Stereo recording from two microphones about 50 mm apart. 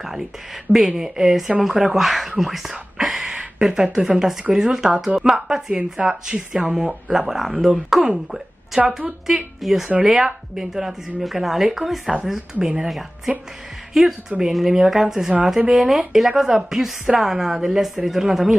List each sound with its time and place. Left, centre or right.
0.7 s a woman's voice: centre
12.5 s a woman's voice: centre
13.9 s a woman's voice: centre